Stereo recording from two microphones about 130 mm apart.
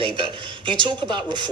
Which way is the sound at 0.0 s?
40° right (ahead or behind).